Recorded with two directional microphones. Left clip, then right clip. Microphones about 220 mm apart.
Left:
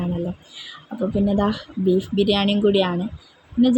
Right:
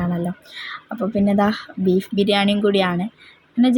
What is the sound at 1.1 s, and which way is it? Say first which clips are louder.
Speech: right 3 dB; 20° right (ahead or behind).